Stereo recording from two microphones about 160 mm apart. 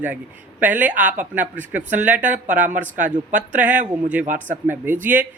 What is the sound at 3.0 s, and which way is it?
Speech, 50° right (ahead or behind).